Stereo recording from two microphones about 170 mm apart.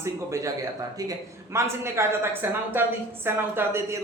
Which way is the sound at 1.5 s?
15° right (ahead or behind).